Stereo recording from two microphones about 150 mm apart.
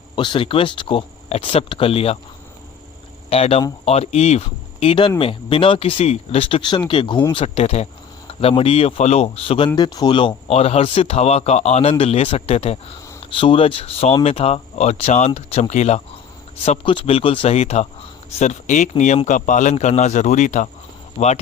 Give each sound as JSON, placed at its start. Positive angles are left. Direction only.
{"t": 0.2, "sound": "speech", "side_deg": 35}
{"t": 3.2, "sound": "speech", "side_deg": 40}
{"t": 7.3, "sound": "speech", "side_deg": 45}
{"t": 9.7, "sound": "speech", "side_deg": 30}
{"t": 16.6, "sound": "speech", "side_deg": 35}